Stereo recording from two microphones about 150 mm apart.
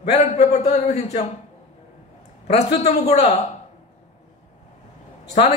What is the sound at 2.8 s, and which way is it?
Speech, 50° left (ahead or behind).